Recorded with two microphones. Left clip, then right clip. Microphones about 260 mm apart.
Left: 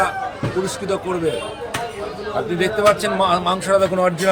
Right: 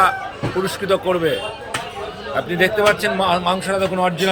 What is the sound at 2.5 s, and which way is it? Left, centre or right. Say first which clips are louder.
Speech: right 1 dB; centre.